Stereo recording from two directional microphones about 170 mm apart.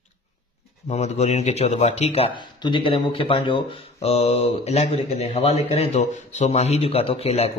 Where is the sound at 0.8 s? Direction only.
40° left (ahead or behind).